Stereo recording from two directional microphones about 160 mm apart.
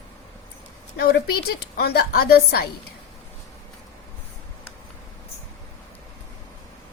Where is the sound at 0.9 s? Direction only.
90° left.